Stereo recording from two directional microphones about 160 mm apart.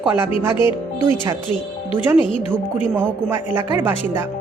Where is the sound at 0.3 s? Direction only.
35° left (ahead or behind).